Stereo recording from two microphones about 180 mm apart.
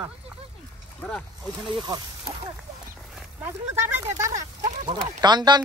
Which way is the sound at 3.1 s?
10° right (ahead or behind).